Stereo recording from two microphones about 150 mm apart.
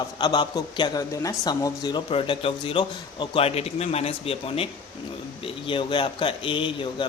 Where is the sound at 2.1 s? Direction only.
40° left (ahead or behind).